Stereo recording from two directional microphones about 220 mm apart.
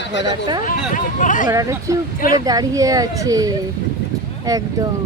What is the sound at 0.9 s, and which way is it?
Speech, 35° left (ahead or behind).